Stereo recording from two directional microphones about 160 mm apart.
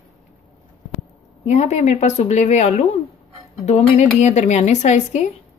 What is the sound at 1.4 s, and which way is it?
A woman's voice, 45° left (ahead or behind).